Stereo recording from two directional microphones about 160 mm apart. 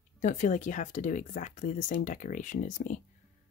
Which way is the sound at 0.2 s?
50° left (ahead or behind).